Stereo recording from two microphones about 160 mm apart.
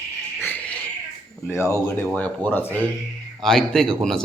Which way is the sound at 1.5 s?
15° left (ahead or behind).